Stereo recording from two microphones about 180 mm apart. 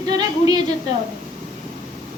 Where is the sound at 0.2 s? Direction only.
20° right (ahead or behind).